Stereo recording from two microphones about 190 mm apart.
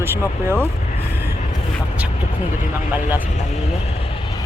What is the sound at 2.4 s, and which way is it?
Speech, 40° left (ahead or behind).